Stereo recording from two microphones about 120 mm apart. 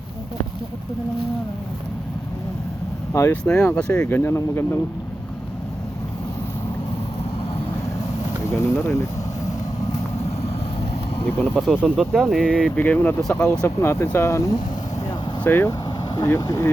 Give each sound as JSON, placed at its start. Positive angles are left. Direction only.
{"t": 3.1, "sound": "speech", "side_deg": 20}
{"t": 3.4, "sound": "speech", "side_deg": 10}
{"t": 4.2, "sound": "speech", "side_deg": 20}
{"t": 8.4, "sound": "speech", "side_deg": 25}
{"t": 10.2, "sound": "vehicle", "side_deg": 55}
{"t": 11.6, "sound": "speech", "side_deg": 10}
{"t": 13.7, "sound": "speech", "side_deg": 25}